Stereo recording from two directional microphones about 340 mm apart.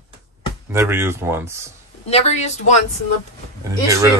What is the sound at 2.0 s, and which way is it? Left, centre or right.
Speech, centre.